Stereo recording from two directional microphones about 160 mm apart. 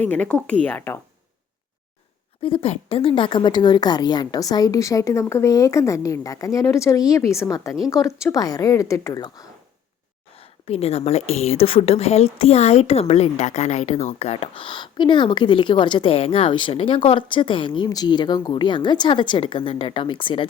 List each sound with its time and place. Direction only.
0.0 s a woman's voice: 10° left (ahead or behind)
2.4 s a woman's voice: 35° left (ahead or behind)
10.3 s a woman's voice: 40° left (ahead or behind)